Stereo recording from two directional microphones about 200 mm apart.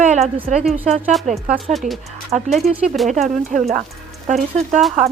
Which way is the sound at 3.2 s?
40° right (ahead or behind).